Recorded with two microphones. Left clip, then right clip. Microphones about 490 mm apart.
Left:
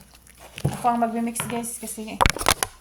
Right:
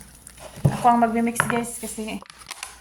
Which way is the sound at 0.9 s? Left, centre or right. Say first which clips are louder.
Right 4 dB; left.